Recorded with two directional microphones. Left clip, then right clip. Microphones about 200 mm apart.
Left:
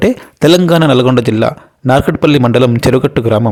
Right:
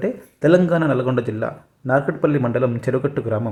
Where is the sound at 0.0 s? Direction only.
45° left (ahead or behind).